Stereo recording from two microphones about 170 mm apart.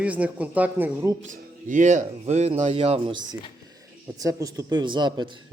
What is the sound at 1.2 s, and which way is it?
Speech, 50° right (ahead or behind).